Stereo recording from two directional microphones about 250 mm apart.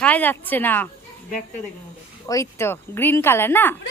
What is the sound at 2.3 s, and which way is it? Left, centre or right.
A woman's voice, centre.